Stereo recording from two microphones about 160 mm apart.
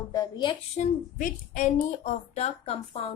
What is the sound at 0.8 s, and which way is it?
A woman's voice, 50° left (ahead or behind).